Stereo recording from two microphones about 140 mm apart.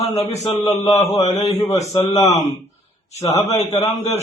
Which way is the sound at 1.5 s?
20° left (ahead or behind).